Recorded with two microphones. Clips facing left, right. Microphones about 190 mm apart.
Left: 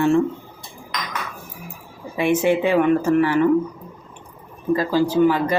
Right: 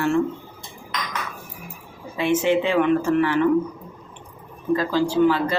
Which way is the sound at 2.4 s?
10° left (ahead or behind).